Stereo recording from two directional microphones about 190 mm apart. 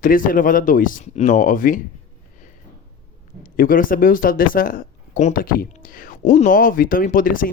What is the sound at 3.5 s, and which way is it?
Speech, 45° left (ahead or behind).